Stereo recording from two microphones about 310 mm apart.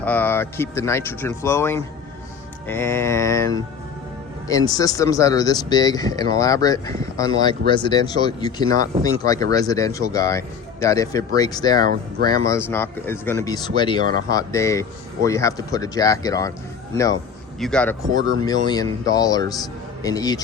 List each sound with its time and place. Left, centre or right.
0.0 s speech: centre
4.4 s speech: centre
8.7 s speech: right
9.0 s speech: centre
14.0 s speech: right
14.3 s speech: centre